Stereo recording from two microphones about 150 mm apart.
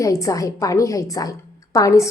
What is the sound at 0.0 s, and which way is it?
A woman's voice, 20° left (ahead or behind).